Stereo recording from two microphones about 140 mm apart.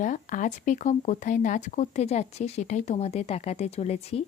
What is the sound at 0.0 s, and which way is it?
Speech, 65° left (ahead or behind).